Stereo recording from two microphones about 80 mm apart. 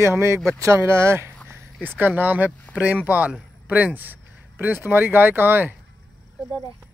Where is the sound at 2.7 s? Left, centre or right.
Left.